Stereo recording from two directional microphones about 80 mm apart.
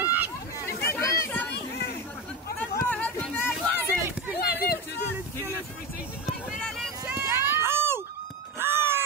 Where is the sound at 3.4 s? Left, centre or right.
Left.